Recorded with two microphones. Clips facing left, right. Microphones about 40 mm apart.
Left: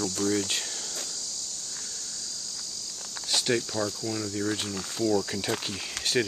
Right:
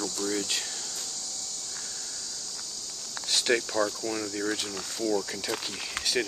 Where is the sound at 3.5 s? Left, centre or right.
Right.